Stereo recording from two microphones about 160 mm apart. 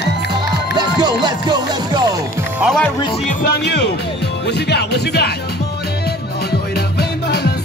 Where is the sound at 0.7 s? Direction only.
25° right (ahead or behind).